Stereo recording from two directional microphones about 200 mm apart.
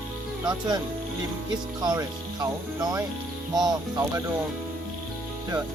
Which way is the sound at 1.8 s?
20° right (ahead or behind).